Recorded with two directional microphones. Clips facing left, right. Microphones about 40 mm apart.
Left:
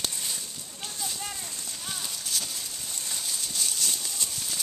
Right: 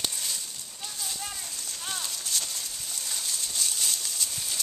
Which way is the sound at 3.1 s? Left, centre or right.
Centre.